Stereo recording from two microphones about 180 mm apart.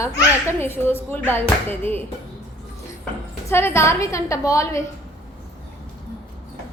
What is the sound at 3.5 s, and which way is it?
A woman's voice, 15° left (ahead or behind).